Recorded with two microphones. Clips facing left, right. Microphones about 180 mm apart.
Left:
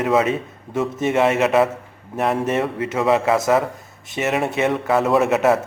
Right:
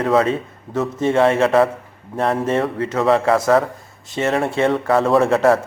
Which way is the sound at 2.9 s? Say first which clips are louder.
Right 2 dB; 5° left (ahead or behind).